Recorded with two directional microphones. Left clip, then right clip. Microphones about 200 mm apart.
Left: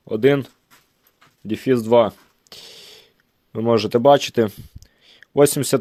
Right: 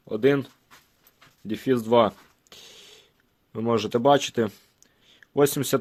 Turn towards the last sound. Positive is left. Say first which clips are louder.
# left 6 dB
turn(degrees=30)  # may be behind; listen again after turning